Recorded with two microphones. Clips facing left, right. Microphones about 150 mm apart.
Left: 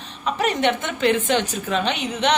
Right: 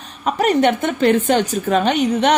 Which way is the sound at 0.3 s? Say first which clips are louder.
Right 5 dB; 40° right (ahead or behind).